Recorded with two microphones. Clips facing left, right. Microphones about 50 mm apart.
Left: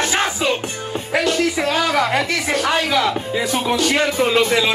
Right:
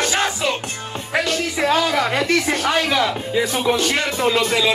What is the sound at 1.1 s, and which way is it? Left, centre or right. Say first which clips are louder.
Music: left 3 dB; centre.